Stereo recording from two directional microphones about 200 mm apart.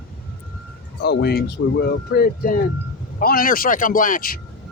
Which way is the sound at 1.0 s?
55° left (ahead or behind).